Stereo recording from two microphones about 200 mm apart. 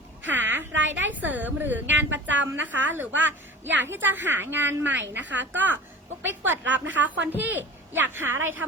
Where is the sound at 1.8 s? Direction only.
65° right (ahead or behind).